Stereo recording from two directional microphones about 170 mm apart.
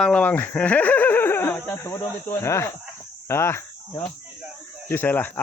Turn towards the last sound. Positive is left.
turn(degrees=10)  # may be behind; listen again after turning